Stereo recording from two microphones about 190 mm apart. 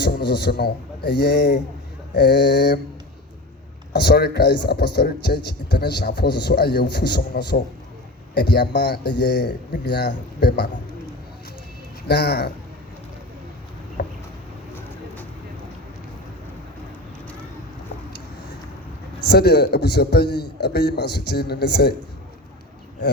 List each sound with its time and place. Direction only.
0.0 s a man's voice: 60° left (ahead or behind)
3.9 s speech: 60° left (ahead or behind)
12.0 s speech: 60° left (ahead or behind)
14.0 s a sound: 55° left (ahead or behind)
19.3 s speech: 60° left (ahead or behind)